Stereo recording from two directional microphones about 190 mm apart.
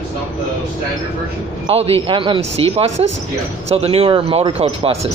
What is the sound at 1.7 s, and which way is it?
Speech, 30° right (ahead or behind).